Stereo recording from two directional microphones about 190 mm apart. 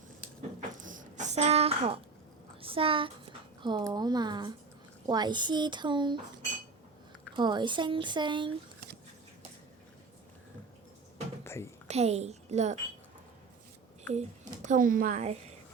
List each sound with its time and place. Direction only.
0.8 s a sound: 45° right (ahead or behind)
2.6 s a child's voice: 30° right (ahead or behind)
7.3 s speech: 25° right (ahead or behind)
11.4 s a sound: 15° left (ahead or behind)
11.9 s a woman's voice: 35° right (ahead or behind)
14.1 s a woman's voice: 40° right (ahead or behind)